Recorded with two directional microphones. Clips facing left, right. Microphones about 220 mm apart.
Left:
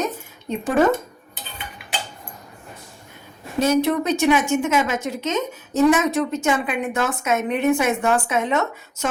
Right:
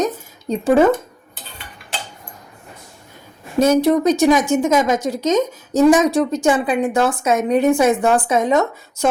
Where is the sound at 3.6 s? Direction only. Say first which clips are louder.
Right 5 dB; 40° right (ahead or behind).